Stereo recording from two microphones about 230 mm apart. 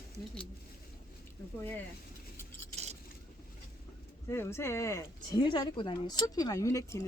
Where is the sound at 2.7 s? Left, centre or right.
Right.